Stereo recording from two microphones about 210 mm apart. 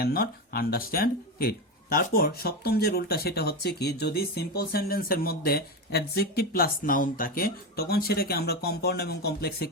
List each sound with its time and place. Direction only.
0.0 s speech: 45° left (ahead or behind)